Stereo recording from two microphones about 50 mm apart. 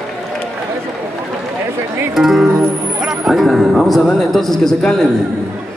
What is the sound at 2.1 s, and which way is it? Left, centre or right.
A man's voice, centre.